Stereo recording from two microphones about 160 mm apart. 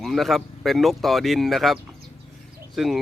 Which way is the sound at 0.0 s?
Centre (ahead or behind).